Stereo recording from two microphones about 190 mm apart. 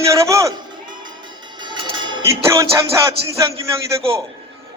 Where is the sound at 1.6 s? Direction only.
25° right (ahead or behind).